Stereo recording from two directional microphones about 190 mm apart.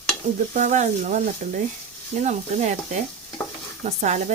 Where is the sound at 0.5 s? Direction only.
40° right (ahead or behind).